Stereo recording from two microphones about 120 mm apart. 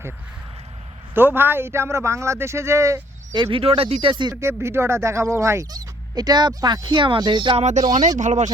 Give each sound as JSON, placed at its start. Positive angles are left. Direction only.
{"t": 1.1, "sound": "a man's voice", "side_deg": -20}
{"t": 3.3, "sound": "speech", "side_deg": -40}
{"t": 3.6, "sound": "speech", "side_deg": -55}
{"t": 4.4, "sound": "speech", "side_deg": -20}
{"t": 7.5, "sound": "speech", "side_deg": -75}
{"t": 7.8, "sound": "speech", "side_deg": -35}
{"t": 8.2, "sound": "speech", "side_deg": -80}